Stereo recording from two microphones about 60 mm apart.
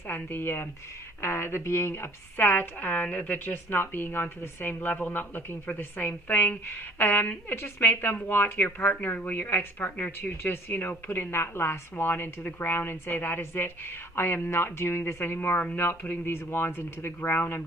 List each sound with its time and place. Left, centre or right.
0.1 s a woman's voice: left
2.4 s a woman's voice: left